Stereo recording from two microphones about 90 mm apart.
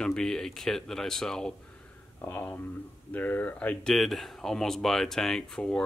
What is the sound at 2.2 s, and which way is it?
Speech, 15° left (ahead or behind).